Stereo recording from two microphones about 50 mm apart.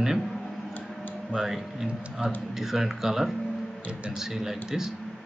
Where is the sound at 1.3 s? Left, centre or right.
Centre.